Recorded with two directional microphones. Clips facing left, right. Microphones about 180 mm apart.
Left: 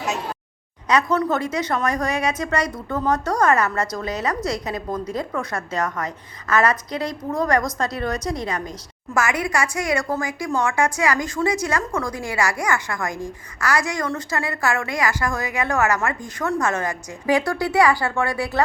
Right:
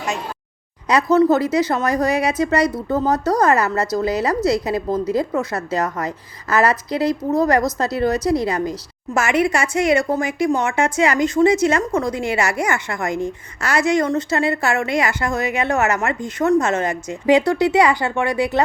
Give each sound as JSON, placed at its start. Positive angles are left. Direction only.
{"t": 1.1, "sound": "speech", "side_deg": -30}